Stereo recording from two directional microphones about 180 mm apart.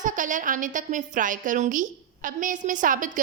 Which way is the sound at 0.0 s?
45° right (ahead or behind).